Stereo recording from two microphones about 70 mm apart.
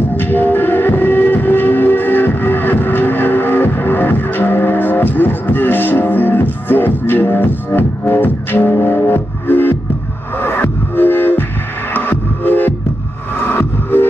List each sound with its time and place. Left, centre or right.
0.2 s train: left
8.8 s music: left